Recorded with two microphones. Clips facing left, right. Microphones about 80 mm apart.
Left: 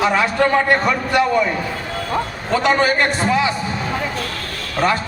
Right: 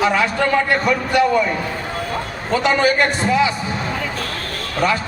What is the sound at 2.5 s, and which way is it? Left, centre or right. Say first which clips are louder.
Speech: even; left.